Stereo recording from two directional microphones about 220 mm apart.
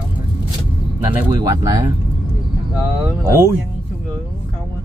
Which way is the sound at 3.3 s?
10° right (ahead or behind).